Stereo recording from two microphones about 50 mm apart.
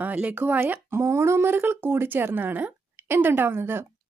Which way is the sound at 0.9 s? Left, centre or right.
Right.